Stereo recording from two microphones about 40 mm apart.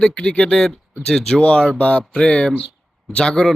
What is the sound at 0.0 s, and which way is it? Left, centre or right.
Speech, left.